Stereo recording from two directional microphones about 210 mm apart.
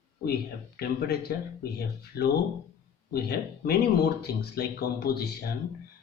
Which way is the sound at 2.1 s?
15° left (ahead or behind).